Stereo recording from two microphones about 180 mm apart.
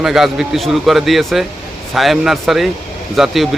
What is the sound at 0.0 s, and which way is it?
A man's voice, centre (ahead or behind).